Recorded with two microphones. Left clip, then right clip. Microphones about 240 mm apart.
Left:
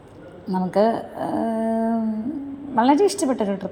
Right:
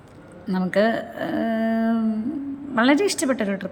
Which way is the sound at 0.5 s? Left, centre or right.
Right.